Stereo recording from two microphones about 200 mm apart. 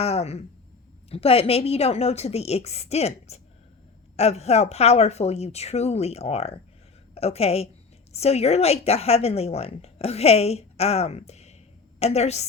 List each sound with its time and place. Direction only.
0.0 s a woman's voice: 30° left (ahead or behind)